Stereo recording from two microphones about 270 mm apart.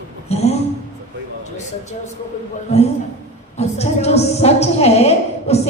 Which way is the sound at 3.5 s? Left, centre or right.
Left.